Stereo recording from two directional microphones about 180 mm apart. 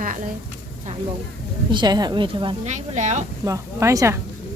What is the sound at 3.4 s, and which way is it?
Speech, 15° right (ahead or behind).